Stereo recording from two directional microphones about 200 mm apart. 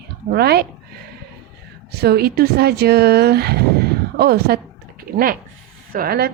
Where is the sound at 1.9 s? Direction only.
50° right (ahead or behind).